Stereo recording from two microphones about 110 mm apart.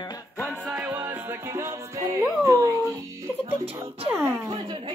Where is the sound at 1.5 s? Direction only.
25° right (ahead or behind).